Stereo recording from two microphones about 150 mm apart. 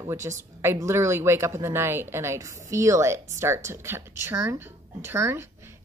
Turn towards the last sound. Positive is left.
turn(degrees=-15)  # may be behind; listen again after turning